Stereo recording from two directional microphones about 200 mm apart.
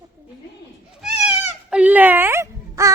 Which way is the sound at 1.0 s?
5° right (ahead or behind).